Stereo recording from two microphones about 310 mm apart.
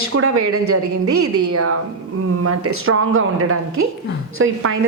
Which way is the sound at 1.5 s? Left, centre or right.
Right.